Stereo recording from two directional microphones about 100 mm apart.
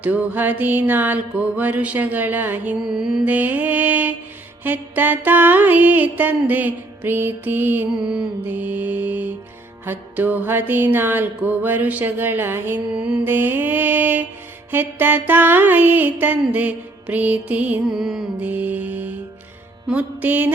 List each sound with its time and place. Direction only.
0.0 s music: 15° right (ahead or behind)
2.8 s music: 5° right (ahead or behind)
3.2 s music: 15° right (ahead or behind)
8.0 s music: 10° right (ahead or behind)
12.9 s music: 10° right (ahead or behind)
18.3 s music: 15° right (ahead or behind)